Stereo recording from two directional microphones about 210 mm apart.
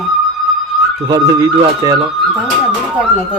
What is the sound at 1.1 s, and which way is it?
Speech, 15° right (ahead or behind).